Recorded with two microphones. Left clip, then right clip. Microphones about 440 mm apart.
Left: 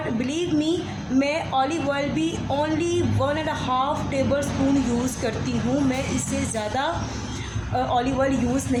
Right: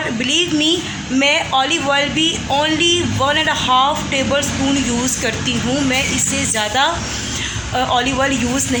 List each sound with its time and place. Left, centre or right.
0.2 s speech: left
7.9 s speech: left